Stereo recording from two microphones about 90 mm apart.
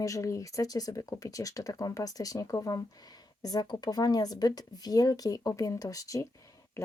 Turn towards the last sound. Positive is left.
turn(degrees=40)  # may be behind; listen again after turning